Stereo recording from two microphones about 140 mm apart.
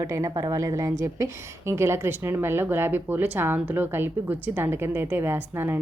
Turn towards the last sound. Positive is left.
turn(degrees=-15)  # may be behind; listen again after turning